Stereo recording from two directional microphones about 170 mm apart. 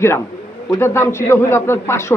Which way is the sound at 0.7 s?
15° left (ahead or behind).